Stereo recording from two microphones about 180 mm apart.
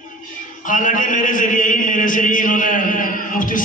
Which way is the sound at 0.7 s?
45° left (ahead or behind).